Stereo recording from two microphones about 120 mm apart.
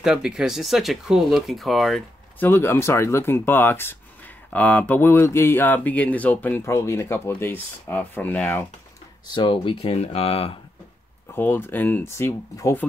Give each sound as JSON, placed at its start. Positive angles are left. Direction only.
{"t": 0.0, "sound": "speech", "side_deg": -5}
{"t": 2.4, "sound": "speech", "side_deg": 20}
{"t": 9.3, "sound": "speech", "side_deg": 45}
{"t": 11.3, "sound": "speech", "side_deg": 15}